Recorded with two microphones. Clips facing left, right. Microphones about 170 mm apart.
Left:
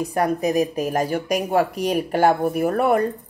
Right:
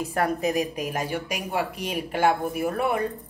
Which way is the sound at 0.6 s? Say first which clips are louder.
Left 6 dB; 45° left (ahead or behind).